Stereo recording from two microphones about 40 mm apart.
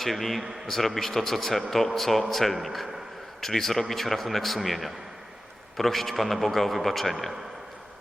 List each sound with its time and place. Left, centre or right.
0.0 s a man's voice: centre